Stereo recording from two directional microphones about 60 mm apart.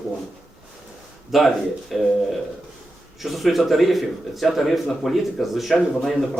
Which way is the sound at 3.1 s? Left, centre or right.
Centre.